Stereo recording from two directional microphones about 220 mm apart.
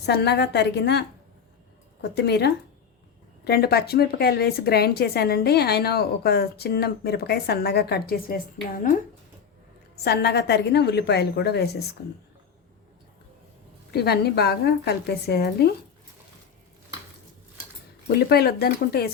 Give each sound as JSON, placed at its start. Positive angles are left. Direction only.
{"t": 0.0, "sound": "speech", "side_deg": 50}
{"t": 10.0, "sound": "speech", "side_deg": 50}
{"t": 13.9, "sound": "speech", "side_deg": 45}
{"t": 18.1, "sound": "speech", "side_deg": 45}